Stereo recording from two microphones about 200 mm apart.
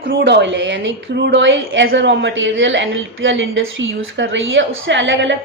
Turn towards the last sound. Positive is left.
turn(degrees=-65)  # may be behind; listen again after turning